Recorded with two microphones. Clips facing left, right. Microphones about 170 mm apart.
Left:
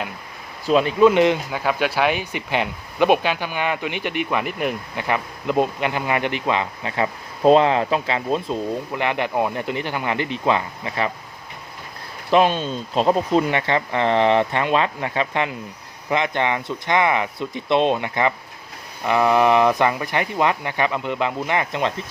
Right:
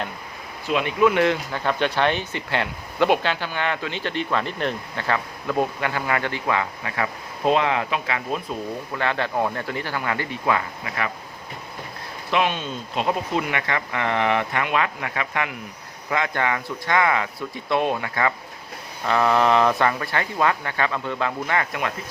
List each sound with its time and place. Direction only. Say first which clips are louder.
0.7 s speech: left 5 dB; 35° left (ahead or behind)
9.0 s speech: left 1 dB; 15° left (ahead or behind)
12.3 s speech: left 6 dB; 35° left (ahead or behind)